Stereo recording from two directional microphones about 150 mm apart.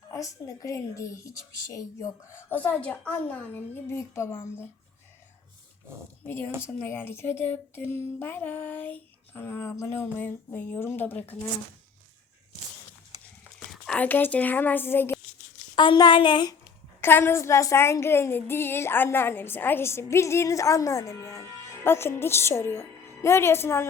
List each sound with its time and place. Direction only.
0.1 s speech: 25° left (ahead or behind)
6.2 s speech: 15° left (ahead or behind)
13.7 s speech: 5° left (ahead or behind)
15.7 s speech: 30° left (ahead or behind)
17.0 s speech: 15° left (ahead or behind)